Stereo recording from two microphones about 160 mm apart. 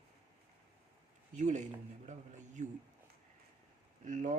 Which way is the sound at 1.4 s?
50° right (ahead or behind).